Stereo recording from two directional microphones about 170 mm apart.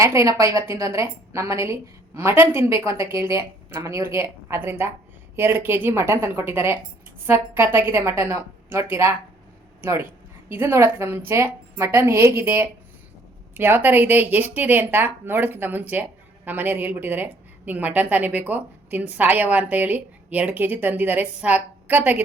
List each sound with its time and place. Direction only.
0.0 s a woman's voice: 15° right (ahead or behind)